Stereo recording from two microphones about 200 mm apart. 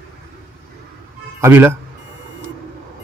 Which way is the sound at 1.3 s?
15° right (ahead or behind).